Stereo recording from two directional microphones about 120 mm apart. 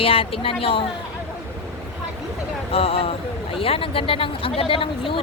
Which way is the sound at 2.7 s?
55° left (ahead or behind).